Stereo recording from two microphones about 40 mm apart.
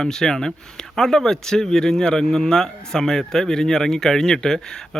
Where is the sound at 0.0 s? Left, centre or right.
Centre.